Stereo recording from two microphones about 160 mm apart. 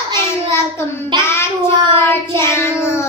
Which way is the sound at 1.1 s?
15° left (ahead or behind).